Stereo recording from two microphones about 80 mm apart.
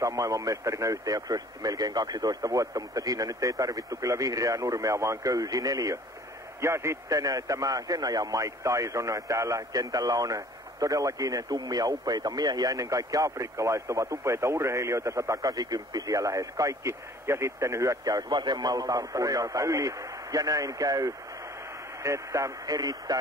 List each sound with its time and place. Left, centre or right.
0.0 s a man's voice: right
6.6 s a man's voice: right
18.3 s a man's voice: right
22.8 s speech: right